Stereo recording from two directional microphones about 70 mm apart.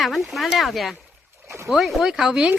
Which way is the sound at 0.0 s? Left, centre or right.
Centre.